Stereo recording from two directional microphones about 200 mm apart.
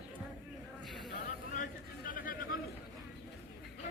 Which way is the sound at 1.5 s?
40° left (ahead or behind).